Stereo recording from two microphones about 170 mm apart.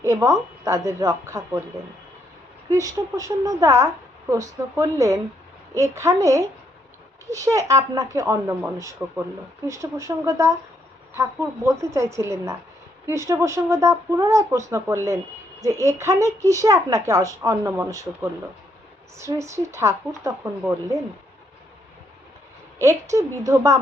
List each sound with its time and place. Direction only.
0.0 s speech: 15° right (ahead or behind)
2.6 s a woman's voice: 20° right (ahead or behind)
22.8 s a woman's voice: 15° right (ahead or behind)